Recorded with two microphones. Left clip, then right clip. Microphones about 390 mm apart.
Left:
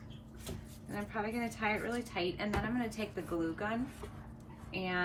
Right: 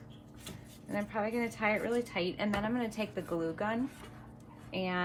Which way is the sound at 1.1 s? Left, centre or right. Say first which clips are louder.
Right 3 dB; centre.